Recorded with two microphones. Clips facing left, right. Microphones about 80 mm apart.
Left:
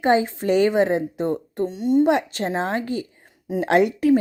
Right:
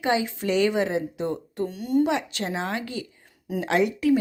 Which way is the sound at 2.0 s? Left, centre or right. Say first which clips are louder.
Left 6 dB; left.